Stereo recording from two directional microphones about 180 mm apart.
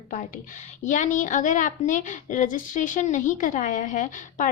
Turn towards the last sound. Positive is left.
turn(degrees=45)  # may be behind; listen again after turning